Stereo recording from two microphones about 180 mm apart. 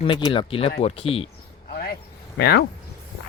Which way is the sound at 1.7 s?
60° left (ahead or behind).